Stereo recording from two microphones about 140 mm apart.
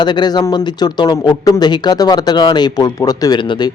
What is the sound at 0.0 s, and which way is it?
Speech, 30° left (ahead or behind).